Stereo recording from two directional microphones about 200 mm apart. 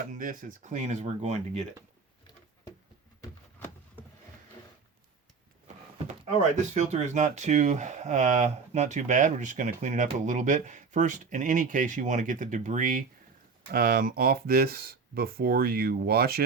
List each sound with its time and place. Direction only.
0.1 s speech: 40° right (ahead or behind)
3.2 s a sound: 10° left (ahead or behind)
6.6 s speech: 35° right (ahead or behind)